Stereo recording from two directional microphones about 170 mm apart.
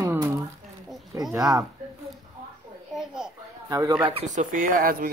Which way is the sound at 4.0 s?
35° right (ahead or behind).